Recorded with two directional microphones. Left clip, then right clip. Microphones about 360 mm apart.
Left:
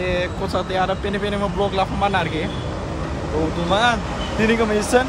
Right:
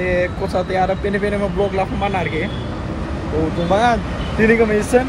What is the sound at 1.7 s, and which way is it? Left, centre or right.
Speech, centre.